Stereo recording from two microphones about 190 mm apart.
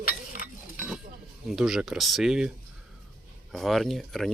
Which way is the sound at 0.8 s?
5° right (ahead or behind).